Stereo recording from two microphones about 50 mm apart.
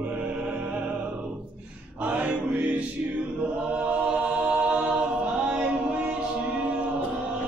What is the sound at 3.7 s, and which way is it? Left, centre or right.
A capella, right.